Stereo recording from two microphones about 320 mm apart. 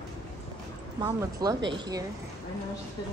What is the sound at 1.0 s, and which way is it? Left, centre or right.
Speech, centre.